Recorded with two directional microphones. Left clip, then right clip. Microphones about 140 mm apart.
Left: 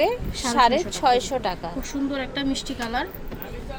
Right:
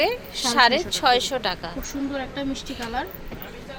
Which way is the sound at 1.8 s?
35° left (ahead or behind).